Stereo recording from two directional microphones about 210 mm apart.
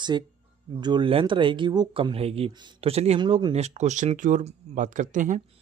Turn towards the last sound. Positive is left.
turn(degrees=-35)  # may be behind; listen again after turning